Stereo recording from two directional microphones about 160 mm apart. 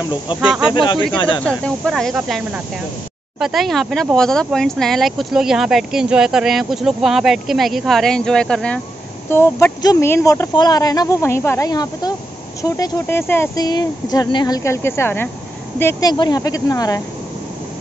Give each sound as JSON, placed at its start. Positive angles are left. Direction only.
{"t": 0.3, "sound": "speech", "side_deg": 30}
{"t": 1.6, "sound": "speech", "side_deg": 0}